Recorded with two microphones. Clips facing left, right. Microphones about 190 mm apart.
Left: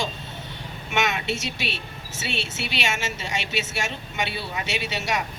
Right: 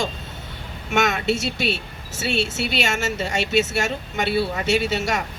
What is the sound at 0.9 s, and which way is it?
Speech, 45° right (ahead or behind).